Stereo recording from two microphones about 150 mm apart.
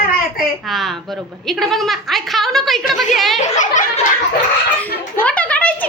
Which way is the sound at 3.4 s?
55° left (ahead or behind).